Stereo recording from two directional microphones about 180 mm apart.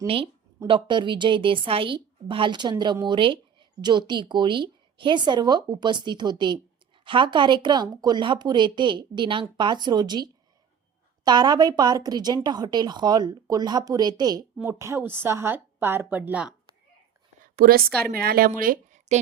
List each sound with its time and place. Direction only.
0.7 s a woman's voice: 25° right (ahead or behind); by 16.5 s 10° right (ahead or behind)
17.4 s a sound: 55° right (ahead or behind)
18.1 s a woman's voice: 55° right (ahead or behind); by 19.2 s 40° right (ahead or behind)